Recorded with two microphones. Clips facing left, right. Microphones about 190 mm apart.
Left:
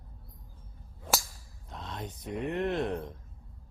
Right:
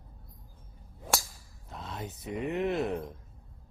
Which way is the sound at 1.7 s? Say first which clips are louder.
Even; 5° right (ahead or behind).